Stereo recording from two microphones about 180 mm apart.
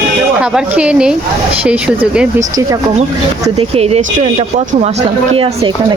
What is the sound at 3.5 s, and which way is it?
Speech, 35° right (ahead or behind).